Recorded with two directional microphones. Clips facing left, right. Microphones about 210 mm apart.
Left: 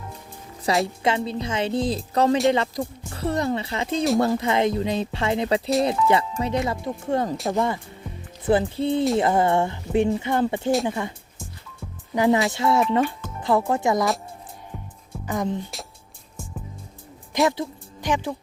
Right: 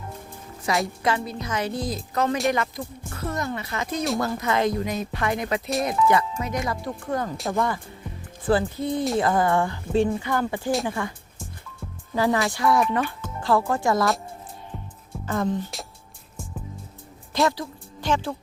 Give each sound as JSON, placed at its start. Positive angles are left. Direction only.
{"t": 0.6, "sound": "a woman's voice", "side_deg": 30}
{"t": 12.1, "sound": "a woman's voice", "side_deg": 20}
{"t": 15.3, "sound": "speech", "side_deg": 15}
{"t": 17.5, "sound": "speech", "side_deg": 20}